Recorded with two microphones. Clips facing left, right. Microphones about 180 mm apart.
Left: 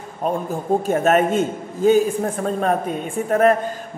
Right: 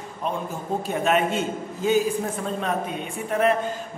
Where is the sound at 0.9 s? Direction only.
45° left (ahead or behind).